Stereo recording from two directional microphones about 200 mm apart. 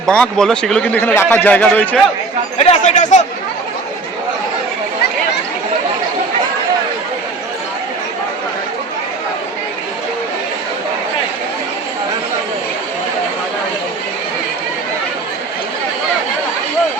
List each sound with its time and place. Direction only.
0.0 s a man's voice: 5° left (ahead or behind)
2.6 s speech: 35° left (ahead or behind)